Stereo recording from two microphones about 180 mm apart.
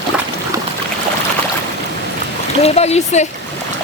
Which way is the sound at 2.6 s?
35° left (ahead or behind).